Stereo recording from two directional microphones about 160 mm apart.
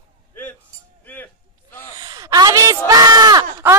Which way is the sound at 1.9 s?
25° right (ahead or behind).